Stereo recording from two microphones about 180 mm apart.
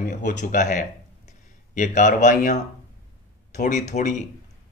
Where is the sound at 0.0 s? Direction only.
45° left (ahead or behind).